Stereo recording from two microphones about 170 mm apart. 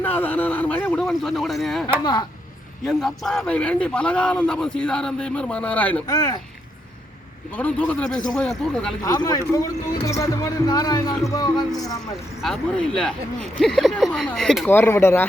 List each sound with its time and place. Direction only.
0.0 s a sound: 10° left (ahead or behind)
2.8 s a man's voice: centre (ahead or behind)
6.1 s speech: 25° left (ahead or behind)
7.5 s a man's voice: 10° left (ahead or behind)
9.0 s speech: 25° left (ahead or behind)
12.4 s a man's voice: 5° left (ahead or behind)